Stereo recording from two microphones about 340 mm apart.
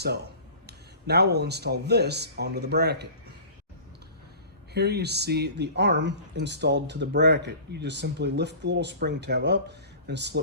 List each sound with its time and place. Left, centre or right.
0.7 s speech: right
4.7 s speech: right